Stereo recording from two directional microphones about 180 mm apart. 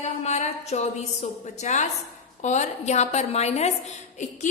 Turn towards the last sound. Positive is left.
turn(degrees=40)  # may be behind; listen again after turning